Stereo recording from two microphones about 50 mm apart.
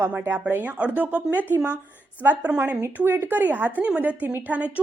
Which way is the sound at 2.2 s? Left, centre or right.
Right.